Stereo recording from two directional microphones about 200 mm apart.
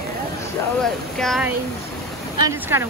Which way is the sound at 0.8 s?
Centre (ahead or behind).